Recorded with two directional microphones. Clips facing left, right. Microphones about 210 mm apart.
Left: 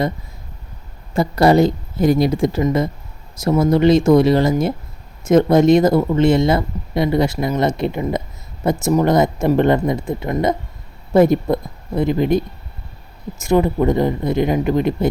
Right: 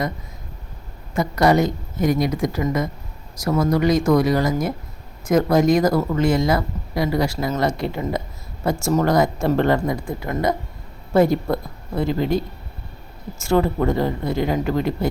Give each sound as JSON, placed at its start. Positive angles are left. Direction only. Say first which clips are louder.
{"t": 1.1, "sound": "speech", "louder": "left 4 dB", "side_deg": 30}